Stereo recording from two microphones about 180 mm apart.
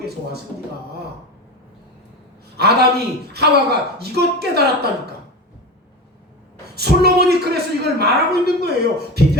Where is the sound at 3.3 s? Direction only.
65° right (ahead or behind).